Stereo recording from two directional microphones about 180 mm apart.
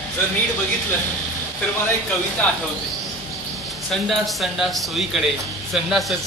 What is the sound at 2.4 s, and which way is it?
Speech, 5° left (ahead or behind).